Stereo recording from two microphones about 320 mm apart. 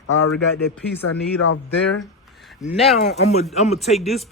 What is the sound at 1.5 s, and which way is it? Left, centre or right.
Speech, left.